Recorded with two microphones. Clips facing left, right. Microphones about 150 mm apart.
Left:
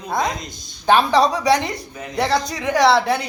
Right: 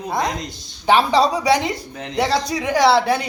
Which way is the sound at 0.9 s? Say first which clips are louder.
Even; 10° right (ahead or behind).